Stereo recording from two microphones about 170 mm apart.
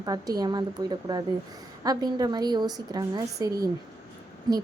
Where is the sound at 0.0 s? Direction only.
25° right (ahead or behind).